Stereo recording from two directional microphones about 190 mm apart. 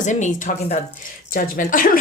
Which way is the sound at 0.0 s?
40° left (ahead or behind).